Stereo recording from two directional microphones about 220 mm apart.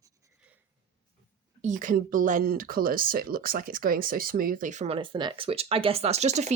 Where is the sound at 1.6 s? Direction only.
35° right (ahead or behind).